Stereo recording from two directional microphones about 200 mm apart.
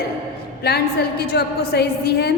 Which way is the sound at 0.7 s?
50° left (ahead or behind).